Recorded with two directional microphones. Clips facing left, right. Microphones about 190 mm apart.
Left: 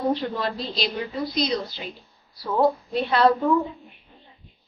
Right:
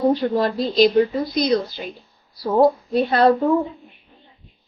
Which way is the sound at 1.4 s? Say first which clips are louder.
Right 7 dB; 55° right (ahead or behind).